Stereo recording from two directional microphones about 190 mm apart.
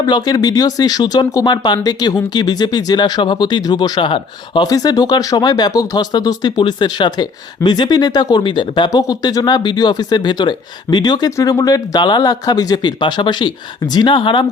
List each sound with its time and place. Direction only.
0.0 s speech: 20° left (ahead or behind)